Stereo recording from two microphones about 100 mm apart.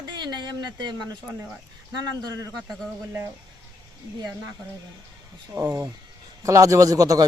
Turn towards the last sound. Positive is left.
turn(degrees=-35)  # may be behind; listen again after turning